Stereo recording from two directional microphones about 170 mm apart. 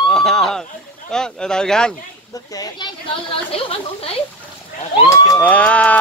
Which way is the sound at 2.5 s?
20° left (ahead or behind).